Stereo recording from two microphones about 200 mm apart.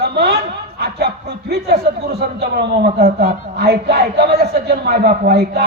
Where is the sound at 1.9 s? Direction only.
55° right (ahead or behind).